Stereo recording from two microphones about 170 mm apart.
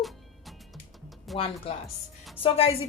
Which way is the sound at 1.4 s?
35° left (ahead or behind).